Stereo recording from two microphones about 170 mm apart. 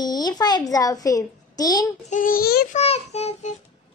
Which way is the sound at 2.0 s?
50° left (ahead or behind).